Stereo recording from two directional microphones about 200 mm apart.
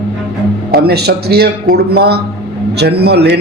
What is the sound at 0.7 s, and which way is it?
A man's voice, 55° right (ahead or behind).